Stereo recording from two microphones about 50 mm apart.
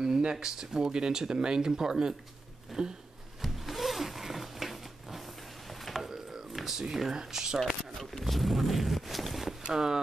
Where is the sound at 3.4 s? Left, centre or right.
Centre.